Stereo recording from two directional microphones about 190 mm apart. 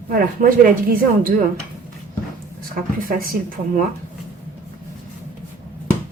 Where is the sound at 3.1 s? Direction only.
45° right (ahead or behind).